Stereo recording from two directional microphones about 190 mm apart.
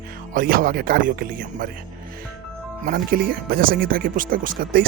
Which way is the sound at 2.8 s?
50° right (ahead or behind).